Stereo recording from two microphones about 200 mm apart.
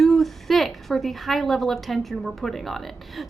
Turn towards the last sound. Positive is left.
turn(degrees=0)  # may be behind; listen again after turning